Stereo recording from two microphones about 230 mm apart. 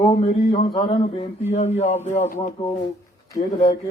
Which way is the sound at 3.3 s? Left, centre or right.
Centre.